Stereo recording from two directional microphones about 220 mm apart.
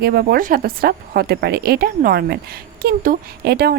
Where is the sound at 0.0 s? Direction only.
45° right (ahead or behind).